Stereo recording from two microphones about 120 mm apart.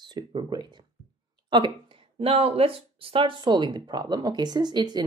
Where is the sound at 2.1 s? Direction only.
55° right (ahead or behind).